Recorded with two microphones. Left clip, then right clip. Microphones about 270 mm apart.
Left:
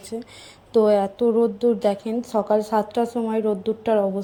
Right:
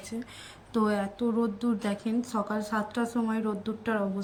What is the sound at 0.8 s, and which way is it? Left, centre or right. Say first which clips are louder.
A woman's voice: left 10 dB; centre.